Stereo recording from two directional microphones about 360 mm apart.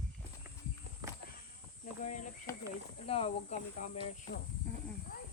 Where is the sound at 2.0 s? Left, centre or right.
Centre.